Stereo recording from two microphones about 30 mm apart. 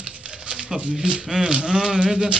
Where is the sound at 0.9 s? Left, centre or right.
Right.